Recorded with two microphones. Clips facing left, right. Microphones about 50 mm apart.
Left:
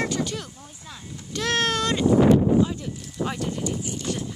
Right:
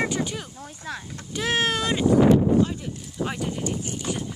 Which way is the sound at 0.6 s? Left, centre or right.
Right.